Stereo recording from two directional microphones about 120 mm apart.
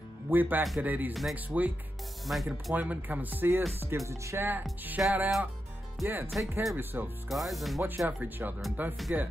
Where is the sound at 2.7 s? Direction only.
15° right (ahead or behind).